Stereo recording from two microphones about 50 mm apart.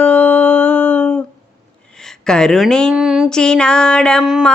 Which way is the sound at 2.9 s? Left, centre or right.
Centre.